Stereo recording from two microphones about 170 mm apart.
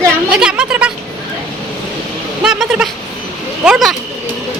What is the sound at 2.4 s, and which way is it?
A woman's voice, 5° right (ahead or behind).